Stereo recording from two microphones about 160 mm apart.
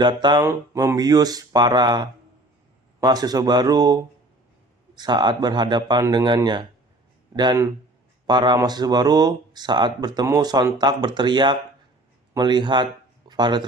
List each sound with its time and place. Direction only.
0.0 s speech: 30° right (ahead or behind)